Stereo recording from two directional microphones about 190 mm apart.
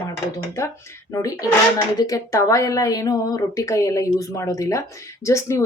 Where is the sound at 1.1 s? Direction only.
15° left (ahead or behind).